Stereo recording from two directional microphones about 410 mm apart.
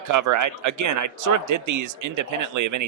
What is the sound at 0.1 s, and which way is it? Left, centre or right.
Speech, right.